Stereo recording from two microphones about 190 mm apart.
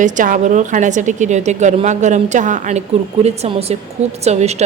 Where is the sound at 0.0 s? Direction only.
40° right (ahead or behind).